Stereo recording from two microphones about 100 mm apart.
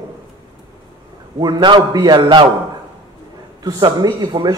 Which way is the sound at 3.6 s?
40° right (ahead or behind).